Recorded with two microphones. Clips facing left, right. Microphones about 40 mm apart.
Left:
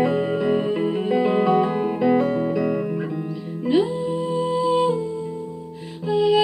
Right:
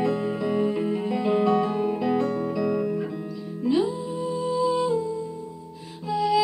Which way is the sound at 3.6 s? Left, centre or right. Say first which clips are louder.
Left 3 dB; left.